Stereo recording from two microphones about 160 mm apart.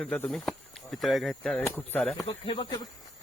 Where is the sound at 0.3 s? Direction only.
Centre (ahead or behind).